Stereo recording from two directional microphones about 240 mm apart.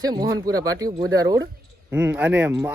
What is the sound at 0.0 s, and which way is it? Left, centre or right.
Speech, centre.